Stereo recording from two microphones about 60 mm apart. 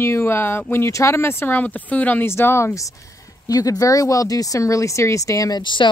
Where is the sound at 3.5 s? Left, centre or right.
Left.